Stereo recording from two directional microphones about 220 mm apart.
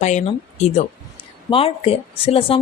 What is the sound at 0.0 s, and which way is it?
Speech, 30° left (ahead or behind).